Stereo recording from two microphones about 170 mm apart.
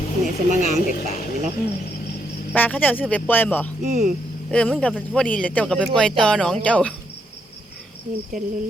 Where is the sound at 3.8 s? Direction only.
45° right (ahead or behind).